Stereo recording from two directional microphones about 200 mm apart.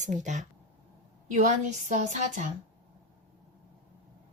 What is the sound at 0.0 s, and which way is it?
Speech, 40° right (ahead or behind).